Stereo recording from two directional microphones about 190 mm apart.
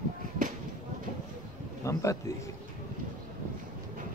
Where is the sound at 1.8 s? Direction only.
15° left (ahead or behind).